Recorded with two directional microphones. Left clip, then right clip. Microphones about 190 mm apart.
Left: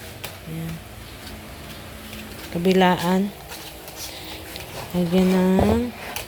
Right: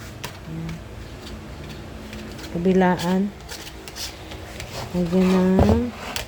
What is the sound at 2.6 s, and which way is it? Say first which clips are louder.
Speech: left 2 dB; 5° right (ahead or behind).